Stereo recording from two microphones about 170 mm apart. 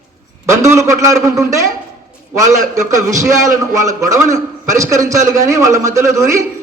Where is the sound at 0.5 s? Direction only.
15° right (ahead or behind).